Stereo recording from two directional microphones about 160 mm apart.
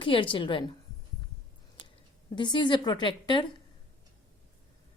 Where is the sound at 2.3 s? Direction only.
30° left (ahead or behind).